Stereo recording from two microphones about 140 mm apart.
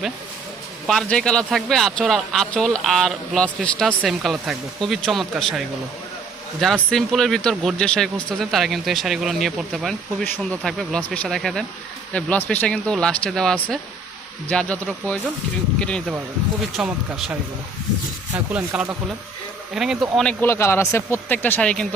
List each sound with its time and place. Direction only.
0.9 s a man's voice: 5° left (ahead or behind)
6.9 s a man's voice: centre (ahead or behind)
16.7 s a man's voice: 5° right (ahead or behind)
18.3 s a man's voice: 10° right (ahead or behind)
20.2 s speech: 15° left (ahead or behind)